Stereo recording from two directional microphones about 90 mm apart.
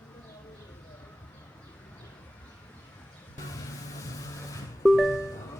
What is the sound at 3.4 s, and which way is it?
Music, 40° left (ahead or behind).